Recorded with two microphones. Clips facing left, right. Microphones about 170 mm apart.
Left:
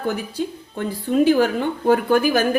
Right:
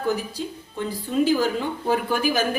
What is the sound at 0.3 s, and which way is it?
Speech, 60° left (ahead or behind).